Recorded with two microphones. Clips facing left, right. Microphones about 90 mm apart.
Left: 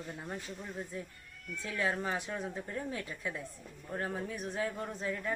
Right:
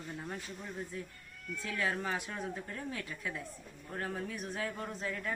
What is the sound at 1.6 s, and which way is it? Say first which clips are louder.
A woman's voice: left 1 dB; 20° left (ahead or behind).